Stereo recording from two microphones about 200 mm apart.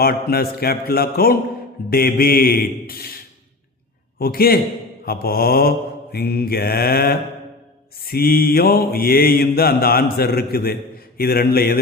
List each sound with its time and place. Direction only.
0.0 s mantra: 50° left (ahead or behind)
4.2 s mantra: 50° left (ahead or behind)